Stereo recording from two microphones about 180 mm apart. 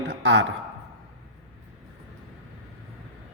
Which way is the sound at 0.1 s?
90° right.